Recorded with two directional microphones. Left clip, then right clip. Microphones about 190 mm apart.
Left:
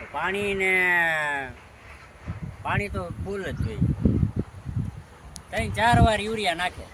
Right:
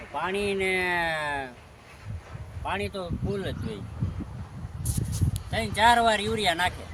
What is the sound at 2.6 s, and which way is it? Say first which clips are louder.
Speech: left 2 dB; 5° left (ahead or behind).